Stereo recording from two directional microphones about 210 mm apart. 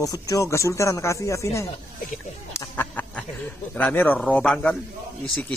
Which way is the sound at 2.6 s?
10° left (ahead or behind).